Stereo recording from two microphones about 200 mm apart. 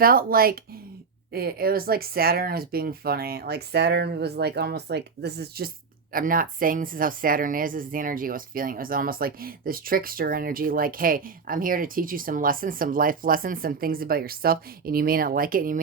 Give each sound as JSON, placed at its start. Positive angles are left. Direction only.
{"t": 0.0, "sound": "speech", "side_deg": -45}